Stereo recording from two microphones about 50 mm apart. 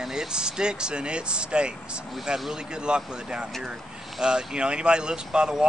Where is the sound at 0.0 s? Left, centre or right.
Centre.